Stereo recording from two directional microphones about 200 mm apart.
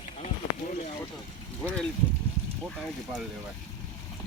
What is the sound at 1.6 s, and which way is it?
Speech, 5° left (ahead or behind).